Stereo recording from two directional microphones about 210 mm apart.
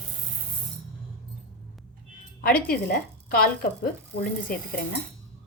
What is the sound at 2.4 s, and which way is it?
A woman's voice, 45° left (ahead or behind).